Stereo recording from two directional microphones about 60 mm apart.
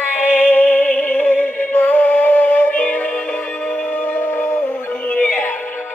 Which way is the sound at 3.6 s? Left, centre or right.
Left.